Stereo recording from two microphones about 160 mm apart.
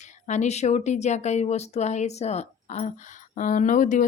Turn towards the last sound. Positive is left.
turn(degrees=50)  # may be behind; listen again after turning